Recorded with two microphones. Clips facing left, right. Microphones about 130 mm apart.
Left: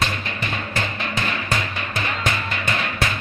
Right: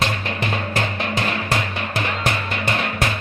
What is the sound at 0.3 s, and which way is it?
Music, 65° right (ahead or behind).